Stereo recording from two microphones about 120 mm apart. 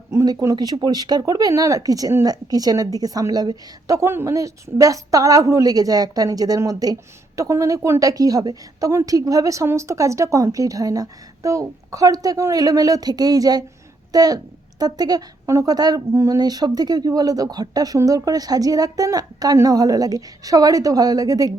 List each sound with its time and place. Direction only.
0.1 s a woman's voice: 25° right (ahead or behind)